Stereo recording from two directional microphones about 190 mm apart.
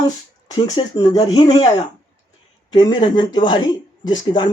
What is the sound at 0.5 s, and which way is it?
Speech, 20° left (ahead or behind).